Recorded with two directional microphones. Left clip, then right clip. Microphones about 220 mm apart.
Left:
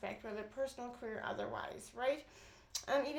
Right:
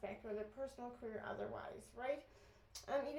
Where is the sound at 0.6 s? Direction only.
30° left (ahead or behind).